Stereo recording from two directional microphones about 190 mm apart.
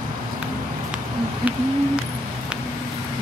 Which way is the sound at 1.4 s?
10° right (ahead or behind).